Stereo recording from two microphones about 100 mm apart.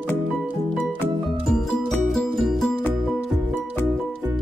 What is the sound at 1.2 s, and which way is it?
Music, centre (ahead or behind).